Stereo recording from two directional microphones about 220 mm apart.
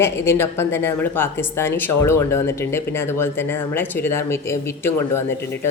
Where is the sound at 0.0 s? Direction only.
10° left (ahead or behind).